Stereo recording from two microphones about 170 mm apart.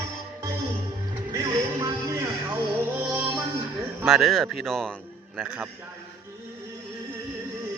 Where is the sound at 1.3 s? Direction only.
20° right (ahead or behind).